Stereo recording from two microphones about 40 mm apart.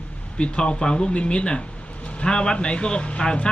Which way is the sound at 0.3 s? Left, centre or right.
Left.